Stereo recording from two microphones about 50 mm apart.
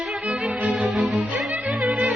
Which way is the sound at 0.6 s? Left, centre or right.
Right.